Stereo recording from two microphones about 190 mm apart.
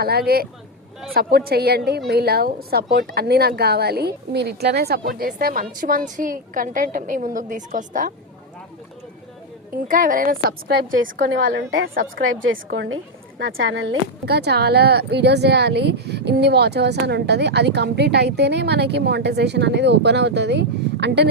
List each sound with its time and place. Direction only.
0.0 s a woman's voice: 55° right (ahead or behind)
9.7 s a woman's voice: 45° right (ahead or behind)
11.5 s a woman's voice: 50° right (ahead or behind)
12.1 s a woman's voice: 90° right; by 21.2 s 65° right (ahead or behind)